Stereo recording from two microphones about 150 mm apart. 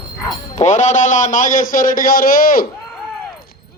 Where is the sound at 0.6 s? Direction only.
55° left (ahead or behind); by 2.7 s 70° left (ahead or behind).